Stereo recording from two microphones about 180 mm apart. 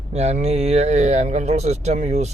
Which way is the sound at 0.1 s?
35° right (ahead or behind).